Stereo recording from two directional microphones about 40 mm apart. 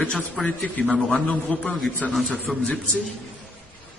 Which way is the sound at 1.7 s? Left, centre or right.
Centre.